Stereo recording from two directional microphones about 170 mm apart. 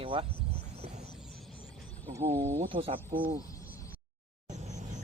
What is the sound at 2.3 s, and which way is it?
Speech, 15° right (ahead or behind).